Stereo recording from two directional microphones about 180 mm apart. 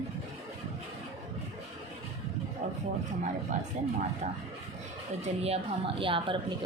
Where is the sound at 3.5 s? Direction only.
45° right (ahead or behind).